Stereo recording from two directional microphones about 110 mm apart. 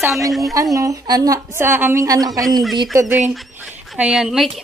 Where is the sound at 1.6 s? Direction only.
20° right (ahead or behind).